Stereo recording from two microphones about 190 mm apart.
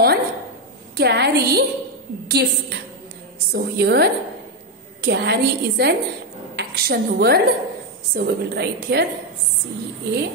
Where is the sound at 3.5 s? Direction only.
60° right (ahead or behind).